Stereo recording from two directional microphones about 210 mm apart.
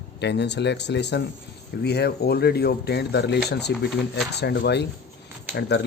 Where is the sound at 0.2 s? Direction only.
55° left (ahead or behind).